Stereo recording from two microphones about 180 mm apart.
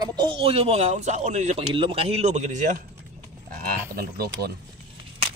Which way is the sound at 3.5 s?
60° right (ahead or behind).